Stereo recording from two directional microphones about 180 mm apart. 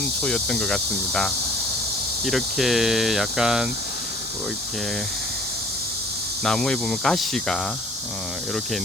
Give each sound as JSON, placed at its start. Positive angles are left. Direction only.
{"t": 0.2, "sound": "speech", "side_deg": 5}
{"t": 6.4, "sound": "speech", "side_deg": 5}